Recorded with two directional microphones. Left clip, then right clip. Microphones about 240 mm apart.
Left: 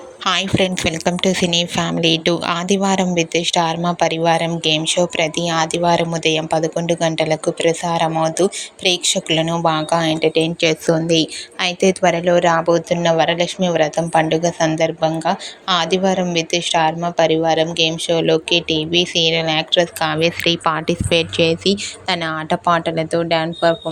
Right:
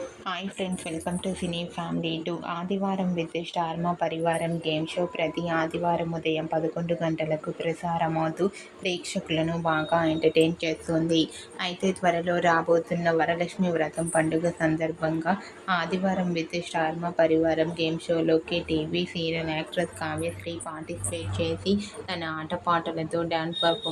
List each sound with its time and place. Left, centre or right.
0.3 s a woman's voice: left
10.2 s a woman's voice: centre
10.6 s a woman's voice: left